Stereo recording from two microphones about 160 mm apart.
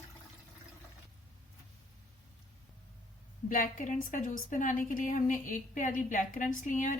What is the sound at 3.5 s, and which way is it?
A woman's voice, 55° left (ahead or behind).